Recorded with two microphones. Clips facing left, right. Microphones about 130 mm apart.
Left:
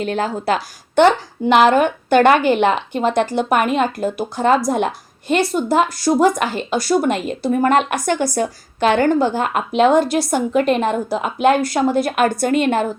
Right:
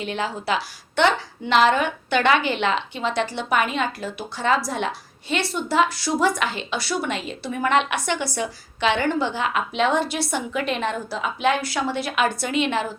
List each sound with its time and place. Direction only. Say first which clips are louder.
0.0 s a woman's voice: left 6 dB; 45° left (ahead or behind)